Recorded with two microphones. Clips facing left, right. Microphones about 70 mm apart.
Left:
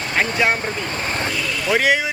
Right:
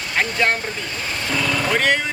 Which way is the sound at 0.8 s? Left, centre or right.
Left.